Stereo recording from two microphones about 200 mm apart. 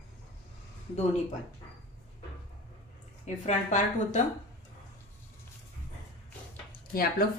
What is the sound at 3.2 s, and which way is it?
Speech, 35° left (ahead or behind).